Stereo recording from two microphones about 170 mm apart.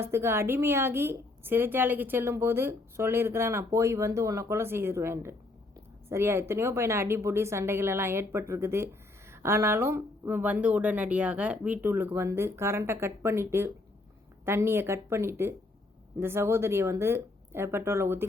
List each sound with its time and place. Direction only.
0.0 s a woman's voice: 15° right (ahead or behind)